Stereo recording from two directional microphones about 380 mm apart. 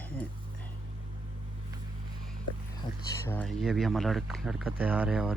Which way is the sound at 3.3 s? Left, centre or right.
Centre.